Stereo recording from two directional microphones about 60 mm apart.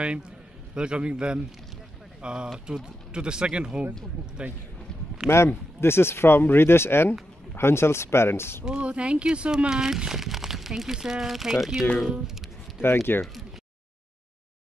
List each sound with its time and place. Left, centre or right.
0.7 s speech: centre
5.3 s speech: left
8.6 s speech: centre
12.1 s a sound: centre
12.8 s speech: left